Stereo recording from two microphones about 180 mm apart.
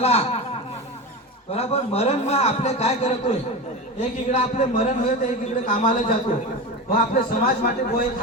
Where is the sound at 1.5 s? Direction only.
35° left (ahead or behind).